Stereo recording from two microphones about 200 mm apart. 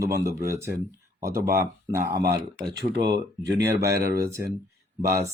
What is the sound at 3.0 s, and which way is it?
Speech, 20° right (ahead or behind).